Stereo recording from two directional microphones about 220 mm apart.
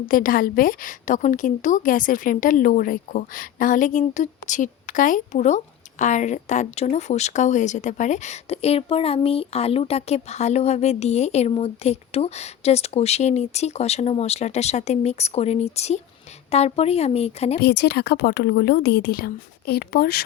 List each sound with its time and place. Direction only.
0.1 s a woman's voice: 40° left (ahead or behind)
17.6 s a woman's voice: 50° left (ahead or behind)